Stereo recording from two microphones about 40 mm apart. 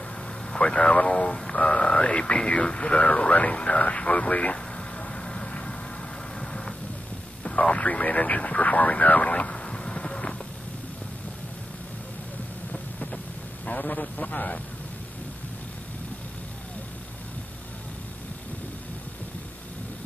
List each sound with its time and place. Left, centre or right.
0.5 s speech: left
4.7 s vehicle: left
6.4 s vehicle: centre
7.7 s speech: left
9.7 s a sound: left
13.7 s a man's voice: left